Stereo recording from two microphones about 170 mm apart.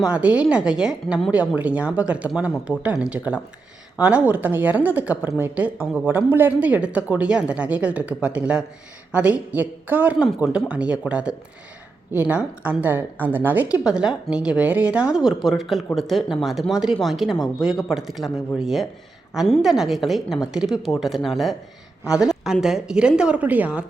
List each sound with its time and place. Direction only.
0.0 s a woman's voice: 10° right (ahead or behind)